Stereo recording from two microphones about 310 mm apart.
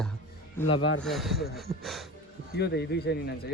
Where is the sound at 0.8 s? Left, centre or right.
Left.